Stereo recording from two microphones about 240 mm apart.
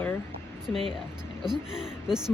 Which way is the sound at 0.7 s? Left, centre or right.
Left.